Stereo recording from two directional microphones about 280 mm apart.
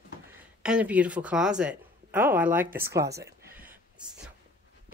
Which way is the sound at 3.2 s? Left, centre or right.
Centre.